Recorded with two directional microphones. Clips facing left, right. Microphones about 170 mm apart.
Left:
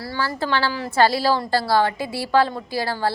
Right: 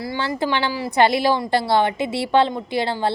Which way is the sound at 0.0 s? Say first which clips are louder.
Right 2 dB; 20° right (ahead or behind).